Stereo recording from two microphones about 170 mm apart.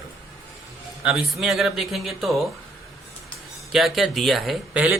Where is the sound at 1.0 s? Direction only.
5° right (ahead or behind).